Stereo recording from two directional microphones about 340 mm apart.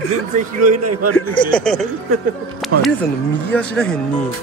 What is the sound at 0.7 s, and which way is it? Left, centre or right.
Speech, right.